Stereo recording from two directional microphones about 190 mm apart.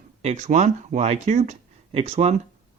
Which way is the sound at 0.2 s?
35° right (ahead or behind).